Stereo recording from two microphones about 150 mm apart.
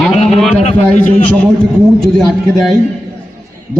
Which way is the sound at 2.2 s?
Centre (ahead or behind).